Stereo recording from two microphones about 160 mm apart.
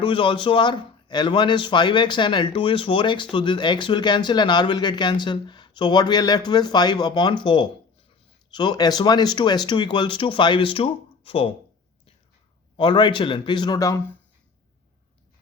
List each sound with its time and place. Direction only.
0.0 s speech: 30° left (ahead or behind)
12.7 s speech: 30° left (ahead or behind)